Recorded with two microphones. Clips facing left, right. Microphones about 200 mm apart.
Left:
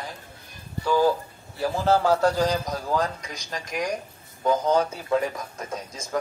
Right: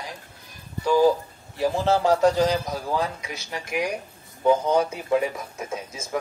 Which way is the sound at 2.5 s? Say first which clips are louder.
Even; 10° right (ahead or behind).